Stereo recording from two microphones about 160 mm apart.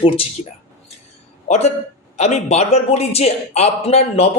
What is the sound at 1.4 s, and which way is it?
A man's voice, 45° left (ahead or behind).